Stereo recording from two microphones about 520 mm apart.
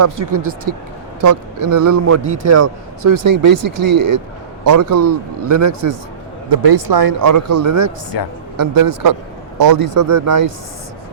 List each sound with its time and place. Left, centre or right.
0.0 s a man's voice: right
6.5 s speech: right
7.2 s a man's voice: right
8.1 s a woman's voice: left
8.5 s a man's voice: right